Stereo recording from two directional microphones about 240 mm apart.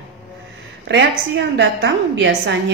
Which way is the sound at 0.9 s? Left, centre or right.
Right.